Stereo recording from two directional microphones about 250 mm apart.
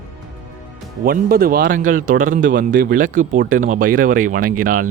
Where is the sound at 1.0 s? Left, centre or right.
Right.